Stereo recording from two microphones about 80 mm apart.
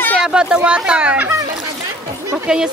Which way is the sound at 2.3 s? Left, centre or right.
Centre.